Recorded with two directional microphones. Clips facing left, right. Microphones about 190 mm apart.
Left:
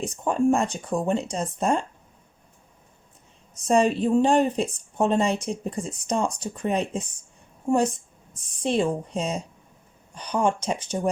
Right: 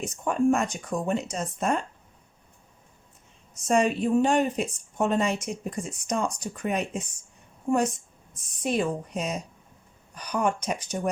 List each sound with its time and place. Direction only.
0.0 s a woman's voice: 30° left (ahead or behind)
3.5 s a woman's voice: 35° left (ahead or behind)
8.6 s speech: 30° left (ahead or behind)